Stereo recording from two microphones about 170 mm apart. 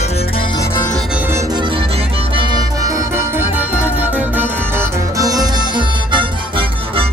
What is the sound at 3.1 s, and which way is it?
Music, 10° right (ahead or behind).